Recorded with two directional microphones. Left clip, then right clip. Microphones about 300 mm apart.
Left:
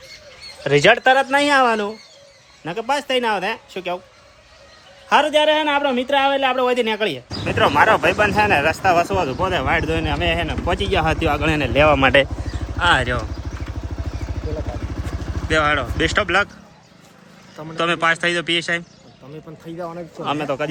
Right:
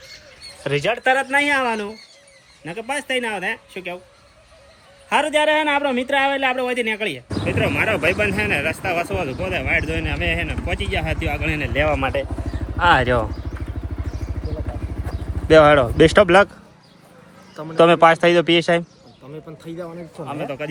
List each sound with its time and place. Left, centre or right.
0.7 s speech: centre
5.0 s speech: centre
12.8 s speech: centre
15.4 s speech: centre
17.6 s speech: centre
20.2 s speech: centre